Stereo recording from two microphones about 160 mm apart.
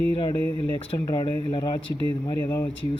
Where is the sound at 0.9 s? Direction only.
20° left (ahead or behind).